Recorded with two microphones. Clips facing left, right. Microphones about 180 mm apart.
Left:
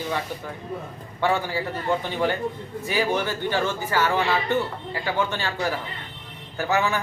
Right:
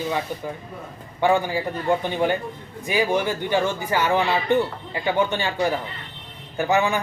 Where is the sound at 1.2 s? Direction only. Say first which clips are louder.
Right 4 dB; 15° right (ahead or behind).